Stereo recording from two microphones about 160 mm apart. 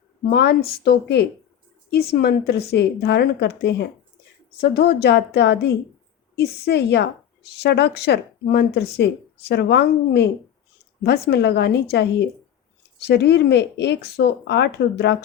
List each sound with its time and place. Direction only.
0.3 s speech: 85° left
1.9 s speech: 75° left (ahead or behind)
4.6 s speech: 80° left